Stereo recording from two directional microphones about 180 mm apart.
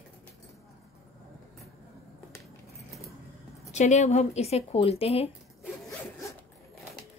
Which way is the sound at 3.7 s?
40° left (ahead or behind).